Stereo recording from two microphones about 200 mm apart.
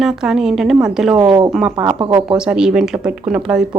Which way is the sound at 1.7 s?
20° right (ahead or behind).